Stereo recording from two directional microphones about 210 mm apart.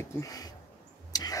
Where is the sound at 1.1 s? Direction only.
15° left (ahead or behind).